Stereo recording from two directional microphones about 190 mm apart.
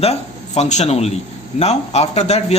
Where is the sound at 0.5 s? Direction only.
35° left (ahead or behind).